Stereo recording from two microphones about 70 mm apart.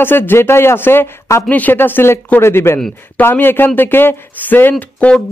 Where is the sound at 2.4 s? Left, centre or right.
Left.